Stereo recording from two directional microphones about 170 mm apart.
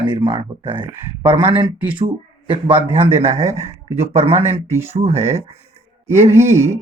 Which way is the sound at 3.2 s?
40° right (ahead or behind).